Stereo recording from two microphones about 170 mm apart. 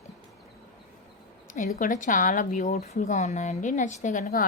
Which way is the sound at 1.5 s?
45° left (ahead or behind).